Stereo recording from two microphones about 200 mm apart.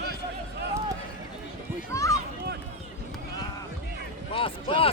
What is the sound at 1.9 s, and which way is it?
Speech, 15° left (ahead or behind).